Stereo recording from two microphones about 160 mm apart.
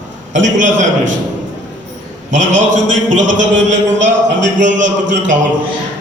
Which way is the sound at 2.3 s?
50° right (ahead or behind).